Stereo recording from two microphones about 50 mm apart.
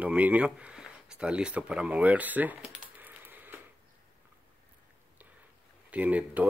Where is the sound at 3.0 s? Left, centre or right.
Right.